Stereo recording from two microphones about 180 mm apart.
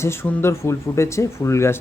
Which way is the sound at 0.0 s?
15° left (ahead or behind).